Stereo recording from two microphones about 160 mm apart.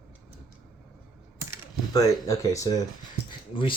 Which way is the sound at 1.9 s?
20° left (ahead or behind).